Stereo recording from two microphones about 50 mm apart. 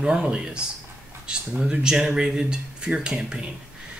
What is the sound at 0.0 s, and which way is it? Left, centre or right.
Speech, centre.